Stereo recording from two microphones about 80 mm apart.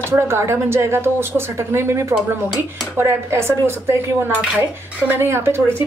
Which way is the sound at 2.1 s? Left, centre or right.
Centre.